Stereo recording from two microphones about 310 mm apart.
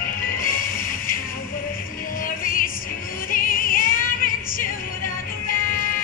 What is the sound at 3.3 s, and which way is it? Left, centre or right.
Music, left.